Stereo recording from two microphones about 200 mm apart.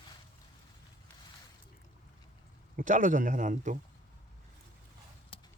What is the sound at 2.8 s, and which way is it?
Speech, 40° right (ahead or behind).